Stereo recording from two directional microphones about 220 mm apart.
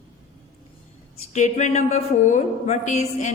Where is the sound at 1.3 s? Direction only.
35° left (ahead or behind).